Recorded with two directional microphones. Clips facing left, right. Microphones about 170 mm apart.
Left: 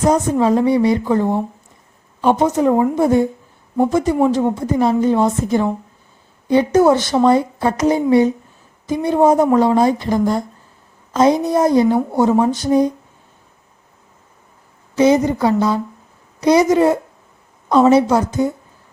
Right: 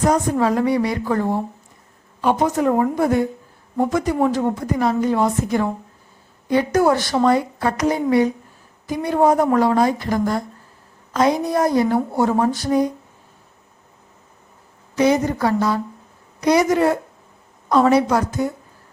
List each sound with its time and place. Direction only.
0.1 s speech: 20° left (ahead or behind)
14.9 s speech: 20° left (ahead or behind)